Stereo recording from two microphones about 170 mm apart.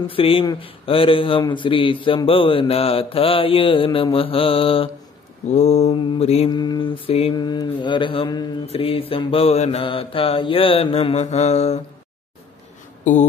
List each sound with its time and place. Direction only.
0.0 s speech: 35° left (ahead or behind)
6.5 s mantra: 25° left (ahead or behind)
8.6 s speech: 35° left (ahead or behind)
13.0 s speech: 45° left (ahead or behind)